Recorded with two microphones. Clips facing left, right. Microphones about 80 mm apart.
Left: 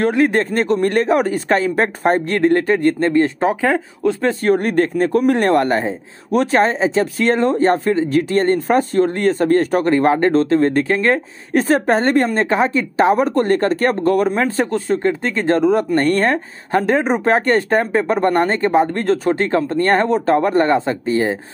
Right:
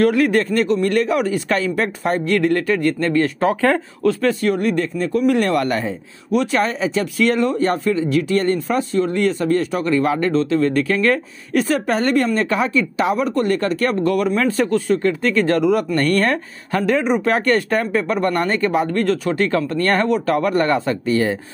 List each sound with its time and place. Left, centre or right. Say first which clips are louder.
0.0 s speech: even; left